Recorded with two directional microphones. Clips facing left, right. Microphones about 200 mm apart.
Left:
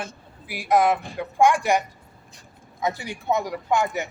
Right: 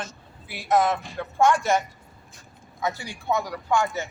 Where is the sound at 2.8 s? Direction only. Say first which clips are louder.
Left 2 dB; 20° left (ahead or behind).